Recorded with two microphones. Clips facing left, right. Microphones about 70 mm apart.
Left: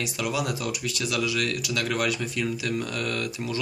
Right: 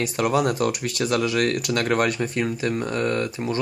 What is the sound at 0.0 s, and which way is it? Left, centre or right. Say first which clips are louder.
Speech: right 7 dB; right.